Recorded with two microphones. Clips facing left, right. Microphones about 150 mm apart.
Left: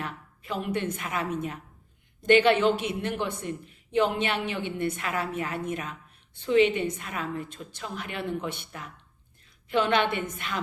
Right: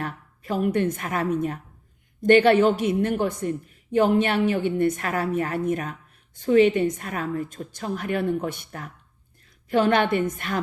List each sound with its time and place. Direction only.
0.0 s a woman's voice: 45° right (ahead or behind)